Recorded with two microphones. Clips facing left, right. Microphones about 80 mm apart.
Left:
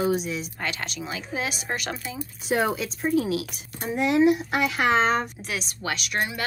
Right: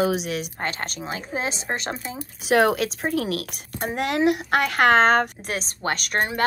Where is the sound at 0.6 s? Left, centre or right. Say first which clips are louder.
Right 2 dB; right.